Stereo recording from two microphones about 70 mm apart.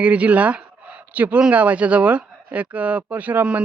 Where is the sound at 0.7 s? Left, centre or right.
Right.